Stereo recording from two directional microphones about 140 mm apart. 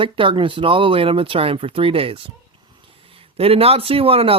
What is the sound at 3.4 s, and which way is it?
A man's voice, 45° right (ahead or behind).